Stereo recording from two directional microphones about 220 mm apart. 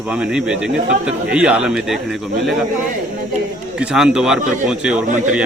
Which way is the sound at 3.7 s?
5° right (ahead or behind).